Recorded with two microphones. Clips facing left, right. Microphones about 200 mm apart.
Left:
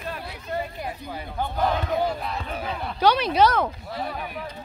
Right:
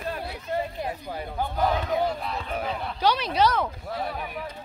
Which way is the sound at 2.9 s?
60° left (ahead or behind).